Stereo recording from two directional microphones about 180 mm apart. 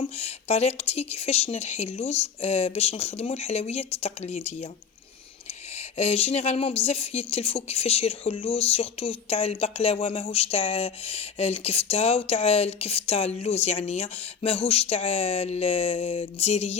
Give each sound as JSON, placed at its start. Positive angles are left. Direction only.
{"t": 0.0, "sound": "a woman's voice", "side_deg": 35}
{"t": 5.7, "sound": "a woman's voice", "side_deg": 35}